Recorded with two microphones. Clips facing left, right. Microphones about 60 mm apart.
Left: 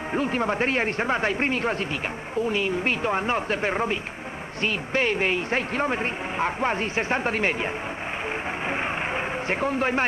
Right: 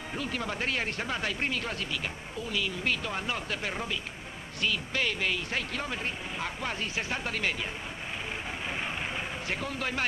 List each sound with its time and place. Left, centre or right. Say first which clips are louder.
0.1 s speech: left 10 dB; left
8.6 s vehicle: left 7 dB; left